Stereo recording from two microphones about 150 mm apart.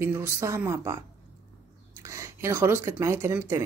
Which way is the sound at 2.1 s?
15° right (ahead or behind).